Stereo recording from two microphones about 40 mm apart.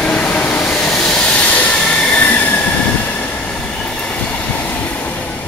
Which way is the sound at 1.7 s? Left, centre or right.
Left.